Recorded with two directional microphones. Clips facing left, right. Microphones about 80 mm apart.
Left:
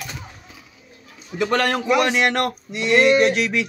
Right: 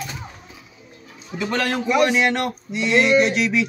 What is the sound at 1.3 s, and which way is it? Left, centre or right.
Speech, left.